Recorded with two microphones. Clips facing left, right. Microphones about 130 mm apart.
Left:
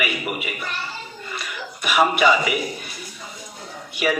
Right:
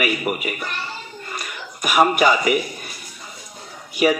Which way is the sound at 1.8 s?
45° right (ahead or behind).